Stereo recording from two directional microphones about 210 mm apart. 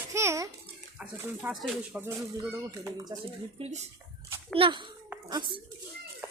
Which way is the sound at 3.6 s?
30° right (ahead or behind).